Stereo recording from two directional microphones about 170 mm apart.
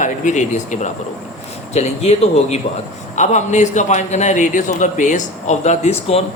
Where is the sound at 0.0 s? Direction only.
45° left (ahead or behind).